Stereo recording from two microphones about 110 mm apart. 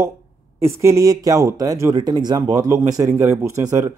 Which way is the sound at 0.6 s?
25° right (ahead or behind).